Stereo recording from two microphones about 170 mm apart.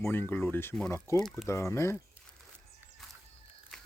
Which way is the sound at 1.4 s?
15° left (ahead or behind).